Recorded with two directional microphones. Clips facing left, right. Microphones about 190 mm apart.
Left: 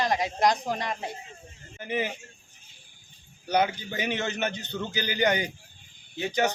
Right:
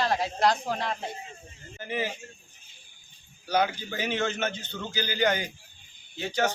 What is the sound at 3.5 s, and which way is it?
A man's voice, 20° left (ahead or behind).